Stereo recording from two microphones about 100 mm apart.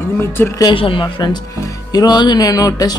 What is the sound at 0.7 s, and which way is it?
Speech, 65° left (ahead or behind).